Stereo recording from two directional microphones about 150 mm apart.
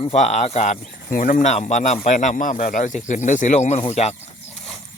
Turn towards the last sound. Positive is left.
turn(degrees=50)  # may be behind; listen again after turning